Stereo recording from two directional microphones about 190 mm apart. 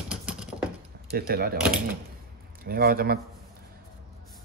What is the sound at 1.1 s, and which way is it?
Speech, 55° right (ahead or behind).